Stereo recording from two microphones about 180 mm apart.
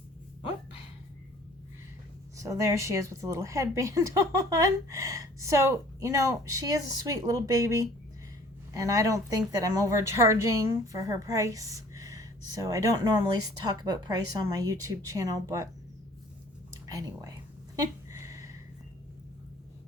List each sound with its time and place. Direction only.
2.4 s a woman's voice: 15° right (ahead or behind)
16.8 s speech: 20° right (ahead or behind)
18.1 s a sound: 15° right (ahead or behind)